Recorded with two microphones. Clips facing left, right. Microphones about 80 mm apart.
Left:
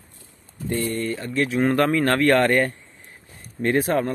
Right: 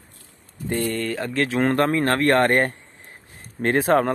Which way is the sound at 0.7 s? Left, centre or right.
Right.